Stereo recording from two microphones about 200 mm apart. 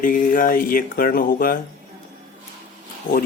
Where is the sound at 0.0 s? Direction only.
45° left (ahead or behind).